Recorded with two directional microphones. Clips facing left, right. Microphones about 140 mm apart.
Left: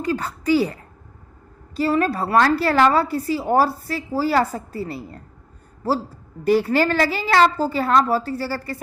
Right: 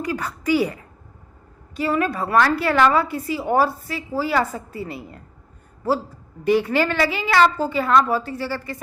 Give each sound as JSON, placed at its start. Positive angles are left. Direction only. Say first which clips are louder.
{"t": 0.0, "sound": "a woman's voice", "louder": "left 2 dB", "side_deg": 30}